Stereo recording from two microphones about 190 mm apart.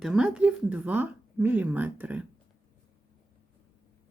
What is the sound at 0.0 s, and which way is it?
Speech, 5° right (ahead or behind).